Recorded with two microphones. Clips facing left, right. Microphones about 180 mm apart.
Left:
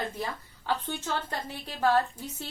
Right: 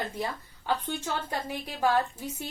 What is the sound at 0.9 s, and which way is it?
A woman's voice, 10° right (ahead or behind).